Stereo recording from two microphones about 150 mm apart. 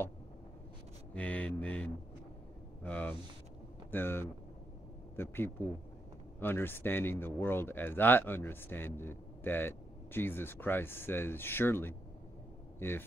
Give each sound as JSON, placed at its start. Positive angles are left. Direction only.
{"t": 1.1, "sound": "speech", "side_deg": 10}